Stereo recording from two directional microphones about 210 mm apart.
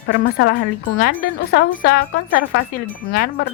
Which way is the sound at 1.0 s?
45° left (ahead or behind).